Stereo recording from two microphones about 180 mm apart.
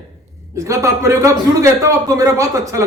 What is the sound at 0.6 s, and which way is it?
A man's voice, 20° right (ahead or behind).